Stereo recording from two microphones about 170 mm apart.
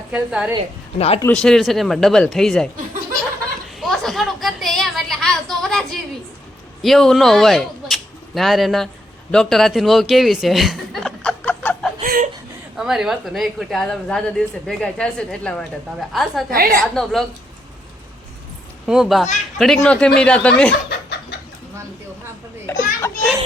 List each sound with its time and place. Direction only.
0.1 s a woman's voice: 5° right (ahead or behind)
0.9 s speech: 35° left (ahead or behind)
1.3 s a woman's voice: 5° left (ahead or behind)
3.8 s a sound: centre (ahead or behind)
6.8 s speech: centre (ahead or behind)
12.0 s chuckle: 60° right (ahead or behind)
12.7 s a woman's voice: 5° right (ahead or behind)
16.5 s a woman's voice: 60° right (ahead or behind)
16.8 s a woman's voice: centre (ahead or behind)
18.9 s a woman's voice: centre (ahead or behind)
22.7 s a child's voice: 10° left (ahead or behind)
23.0 s children playing: 15° left (ahead or behind)